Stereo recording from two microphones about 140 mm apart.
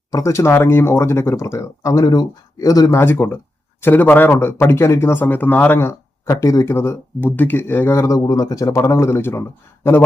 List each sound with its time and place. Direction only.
0.1 s speech: 20° left (ahead or behind)